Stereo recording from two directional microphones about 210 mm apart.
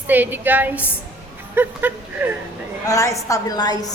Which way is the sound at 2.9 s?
15° left (ahead or behind).